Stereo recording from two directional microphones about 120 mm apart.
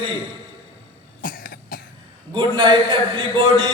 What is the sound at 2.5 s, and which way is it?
A man's voice, 40° right (ahead or behind).